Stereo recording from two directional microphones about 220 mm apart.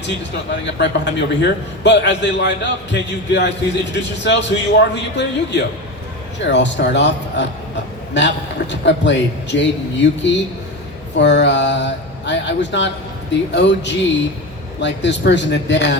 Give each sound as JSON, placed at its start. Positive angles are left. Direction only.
{"t": 0.6, "sound": "a man's voice", "side_deg": 55}